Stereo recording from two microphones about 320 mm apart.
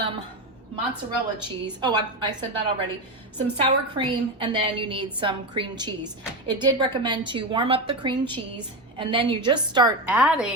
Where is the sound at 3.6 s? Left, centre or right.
Centre.